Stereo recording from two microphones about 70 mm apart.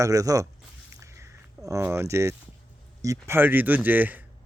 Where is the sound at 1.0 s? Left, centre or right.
Right.